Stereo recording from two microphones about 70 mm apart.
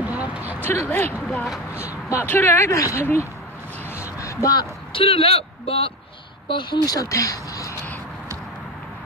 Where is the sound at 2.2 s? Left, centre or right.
Left.